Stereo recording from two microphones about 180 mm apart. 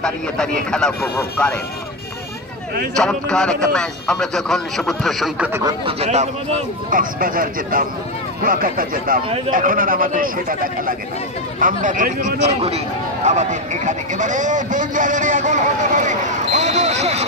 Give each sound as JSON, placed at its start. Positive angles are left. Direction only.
{"t": 0.0, "sound": "speech", "side_deg": 5}
{"t": 3.0, "sound": "speech", "side_deg": 5}
{"t": 5.5, "sound": "speech", "side_deg": -20}
{"t": 5.9, "sound": "speech", "side_deg": -35}
{"t": 6.9, "sound": "a man's voice", "side_deg": -50}